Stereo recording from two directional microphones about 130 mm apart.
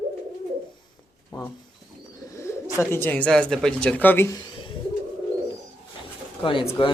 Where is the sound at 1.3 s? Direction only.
35° left (ahead or behind).